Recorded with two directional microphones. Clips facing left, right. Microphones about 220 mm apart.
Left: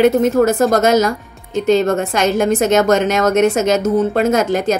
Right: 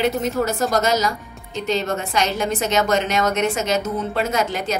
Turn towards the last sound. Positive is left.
turn(degrees=50)  # may be behind; listen again after turning